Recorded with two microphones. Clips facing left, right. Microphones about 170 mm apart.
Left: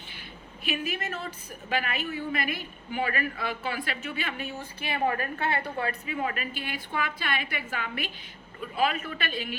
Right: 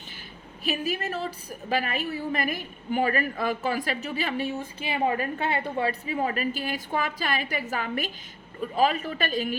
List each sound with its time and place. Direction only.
0.6 s a woman's voice: 40° right (ahead or behind)